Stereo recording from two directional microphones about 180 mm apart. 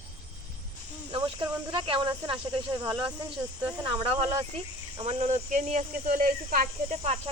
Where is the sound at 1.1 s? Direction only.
30° right (ahead or behind).